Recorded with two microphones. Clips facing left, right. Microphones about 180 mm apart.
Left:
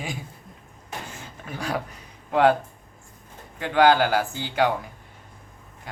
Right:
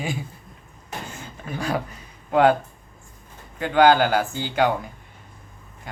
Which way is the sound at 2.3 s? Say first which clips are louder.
Right 2 dB; centre (ahead or behind).